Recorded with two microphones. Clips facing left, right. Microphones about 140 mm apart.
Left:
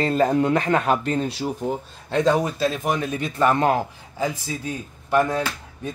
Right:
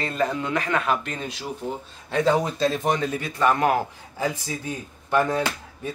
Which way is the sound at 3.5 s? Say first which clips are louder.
Left 1 dB; 25° left (ahead or behind).